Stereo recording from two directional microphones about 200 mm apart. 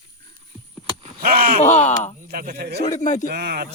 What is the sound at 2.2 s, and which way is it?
Speech, 50° right (ahead or behind).